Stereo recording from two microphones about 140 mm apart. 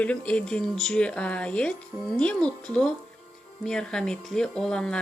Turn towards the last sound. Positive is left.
turn(degrees=5)  # may be behind; listen again after turning